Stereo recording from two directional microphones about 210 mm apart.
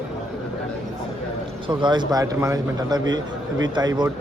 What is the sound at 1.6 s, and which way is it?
Speech, 20° right (ahead or behind).